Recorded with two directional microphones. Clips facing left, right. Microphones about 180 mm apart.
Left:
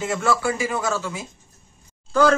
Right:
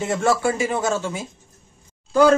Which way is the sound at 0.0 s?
25° right (ahead or behind).